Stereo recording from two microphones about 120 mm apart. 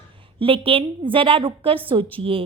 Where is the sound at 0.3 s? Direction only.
50° right (ahead or behind).